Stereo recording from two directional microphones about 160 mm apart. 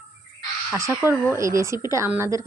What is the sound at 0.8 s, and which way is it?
A woman's voice, 15° right (ahead or behind).